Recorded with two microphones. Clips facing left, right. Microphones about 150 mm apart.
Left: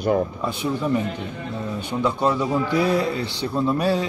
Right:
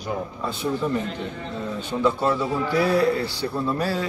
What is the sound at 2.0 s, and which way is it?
A man's voice, 15° left (ahead or behind).